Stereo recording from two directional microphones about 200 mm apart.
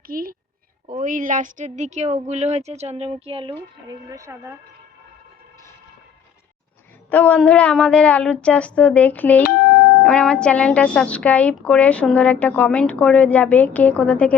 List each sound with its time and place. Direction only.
0.1 s a woman's voice: 45° right (ahead or behind); by 4.5 s 15° right (ahead or behind)
7.1 s a woman's voice: 5° left (ahead or behind)
9.4 s music: 50° left (ahead or behind)
10.0 s a woman's voice: 5° left (ahead or behind)